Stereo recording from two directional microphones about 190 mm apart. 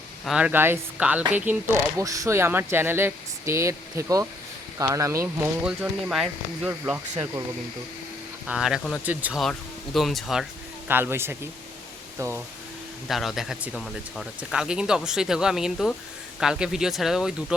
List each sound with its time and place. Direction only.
0.3 s speech: 5° right (ahead or behind)
5.6 s speech: 5° right (ahead or behind)
8.4 s speech: 5° right (ahead or behind)
10.8 s speech: 10° right (ahead or behind)
13.1 s speech: centre (ahead or behind)